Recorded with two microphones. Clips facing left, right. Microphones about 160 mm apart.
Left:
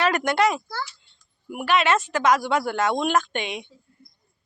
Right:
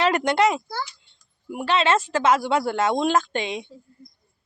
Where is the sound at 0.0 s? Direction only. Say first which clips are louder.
Right 1 dB; 25° right (ahead or behind).